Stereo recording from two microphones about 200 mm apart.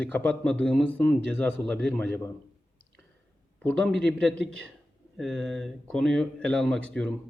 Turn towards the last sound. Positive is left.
turn(degrees=5)  # may be behind; listen again after turning